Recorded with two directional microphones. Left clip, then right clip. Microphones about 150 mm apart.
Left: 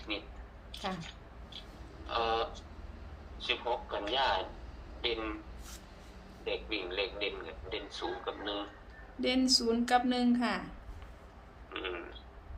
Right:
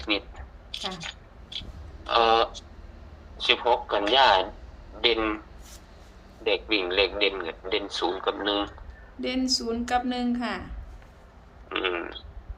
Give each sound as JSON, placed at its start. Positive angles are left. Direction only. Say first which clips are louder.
{"t": 0.1, "sound": "a sound", "louder": "right 11 dB", "side_deg": -90}
{"t": 2.0, "sound": "a man's voice", "louder": "right 12 dB", "side_deg": -90}
{"t": 6.4, "sound": "a man's voice", "louder": "right 11 dB", "side_deg": -90}
{"t": 9.2, "sound": "a woman's voice", "louder": "right 2 dB", "side_deg": 0}
{"t": 11.7, "sound": "a man's voice", "louder": "right 11 dB", "side_deg": -90}